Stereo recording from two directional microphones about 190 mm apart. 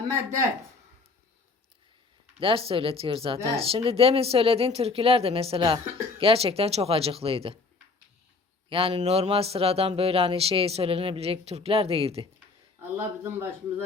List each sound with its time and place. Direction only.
2.4 s speech: 30° right (ahead or behind)
8.7 s speech: 30° right (ahead or behind)
13.0 s speech: 10° right (ahead or behind)